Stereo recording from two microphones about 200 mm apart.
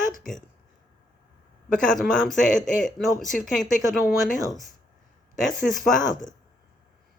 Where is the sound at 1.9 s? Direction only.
Centre (ahead or behind).